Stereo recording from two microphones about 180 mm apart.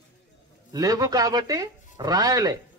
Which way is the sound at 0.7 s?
20° right (ahead or behind).